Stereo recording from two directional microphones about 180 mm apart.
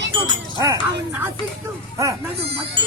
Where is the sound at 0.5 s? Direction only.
20° right (ahead or behind).